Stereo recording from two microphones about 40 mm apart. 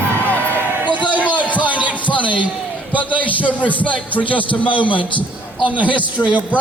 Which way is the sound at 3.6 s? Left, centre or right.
Left.